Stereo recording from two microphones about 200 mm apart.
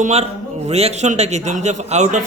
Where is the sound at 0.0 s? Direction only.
30° right (ahead or behind).